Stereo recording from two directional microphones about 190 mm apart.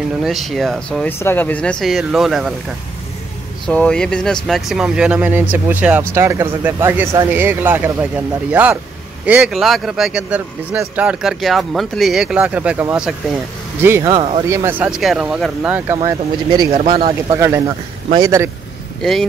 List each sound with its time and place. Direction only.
0.2 s speech: centre (ahead or behind)
3.6 s speech: 5° left (ahead or behind); by 14.1 s 15° right (ahead or behind)
14.1 s speech: 30° right (ahead or behind)
14.5 s speech: 10° right (ahead or behind)
16.5 s speech: 30° right (ahead or behind)
17.4 s speech: 20° right (ahead or behind)